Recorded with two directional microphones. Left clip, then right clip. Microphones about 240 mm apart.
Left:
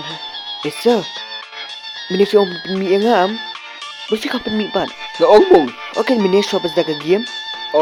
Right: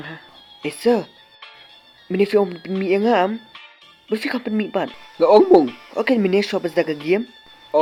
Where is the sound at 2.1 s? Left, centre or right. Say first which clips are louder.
Left 4 dB; centre.